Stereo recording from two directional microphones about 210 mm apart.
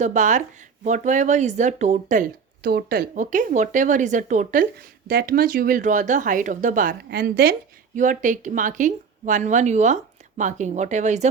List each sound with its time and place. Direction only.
0.0 s speech: 35° right (ahead or behind)